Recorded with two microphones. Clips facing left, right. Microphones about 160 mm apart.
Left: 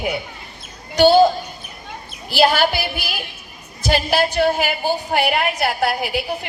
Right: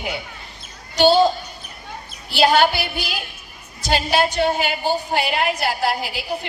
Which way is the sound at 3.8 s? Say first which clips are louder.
Left 1 dB; 60° left (ahead or behind).